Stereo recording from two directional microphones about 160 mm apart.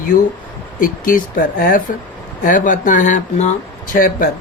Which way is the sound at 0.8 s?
60° left (ahead or behind).